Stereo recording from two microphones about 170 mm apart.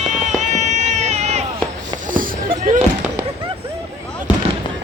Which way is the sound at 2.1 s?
55° right (ahead or behind).